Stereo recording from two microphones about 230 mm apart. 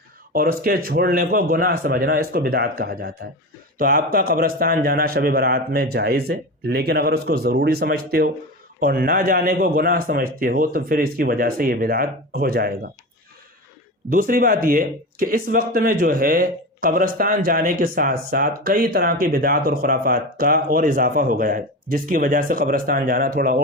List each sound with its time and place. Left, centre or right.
0.3 s speech: right
14.1 s speech: right